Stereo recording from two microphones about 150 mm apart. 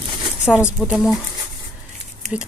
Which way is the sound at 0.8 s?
5° right (ahead or behind).